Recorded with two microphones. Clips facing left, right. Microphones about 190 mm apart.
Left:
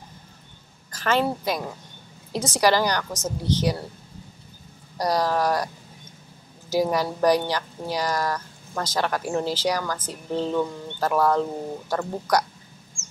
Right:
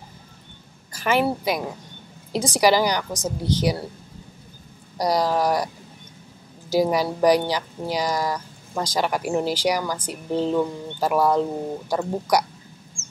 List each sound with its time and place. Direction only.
0.9 s speech: 10° right (ahead or behind)
4.9 s speech: 10° right (ahead or behind)
6.7 s speech: 10° right (ahead or behind)